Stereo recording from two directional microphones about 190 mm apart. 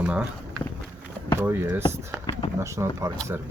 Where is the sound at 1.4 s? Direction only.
10° right (ahead or behind).